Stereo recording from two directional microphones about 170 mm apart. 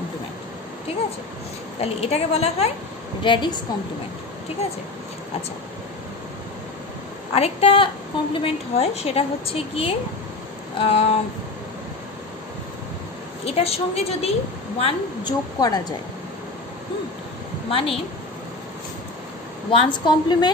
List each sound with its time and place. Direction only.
1.8 s a woman's voice: 35° left (ahead or behind)
3.3 s a woman's voice: 25° left (ahead or behind)
7.3 s a woman's voice: 35° left (ahead or behind)
13.5 s a woman's voice: 35° left (ahead or behind)
17.6 s a woman's voice: 35° left (ahead or behind)
19.7 s a woman's voice: 30° left (ahead or behind)